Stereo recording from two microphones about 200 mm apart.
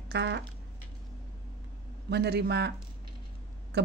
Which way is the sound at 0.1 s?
60° right (ahead or behind).